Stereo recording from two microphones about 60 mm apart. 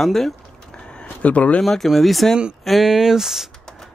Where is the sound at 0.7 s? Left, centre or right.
Centre.